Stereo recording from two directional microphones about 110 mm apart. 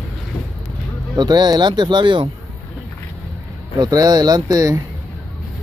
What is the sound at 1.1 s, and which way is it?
Speech, 40° right (ahead or behind).